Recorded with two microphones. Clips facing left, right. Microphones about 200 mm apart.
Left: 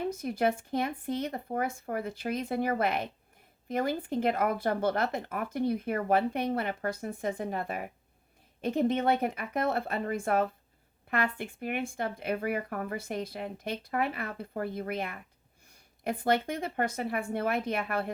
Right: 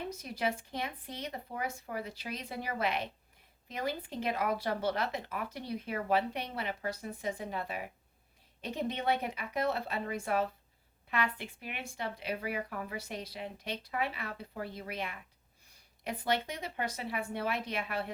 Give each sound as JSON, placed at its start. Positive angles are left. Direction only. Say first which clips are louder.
{"t": 0.1, "sound": "speech", "louder": "left 6 dB", "side_deg": 50}